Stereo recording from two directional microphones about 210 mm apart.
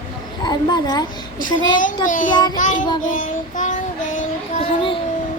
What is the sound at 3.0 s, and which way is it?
Child singing, 40° left (ahead or behind).